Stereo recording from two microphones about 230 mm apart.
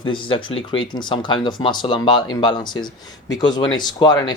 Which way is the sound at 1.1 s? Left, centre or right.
Centre.